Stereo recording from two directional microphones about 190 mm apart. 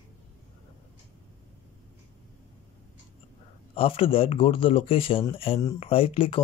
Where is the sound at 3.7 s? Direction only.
30° left (ahead or behind).